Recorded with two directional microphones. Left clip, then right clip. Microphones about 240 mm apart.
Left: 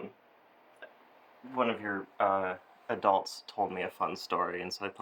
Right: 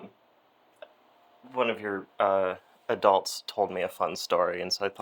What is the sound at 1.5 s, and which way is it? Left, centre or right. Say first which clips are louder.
Speech: right 3 dB; right.